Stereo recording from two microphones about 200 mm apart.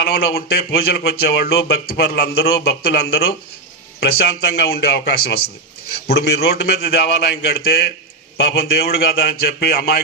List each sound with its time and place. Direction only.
0.0 s speech: 55° left (ahead or behind)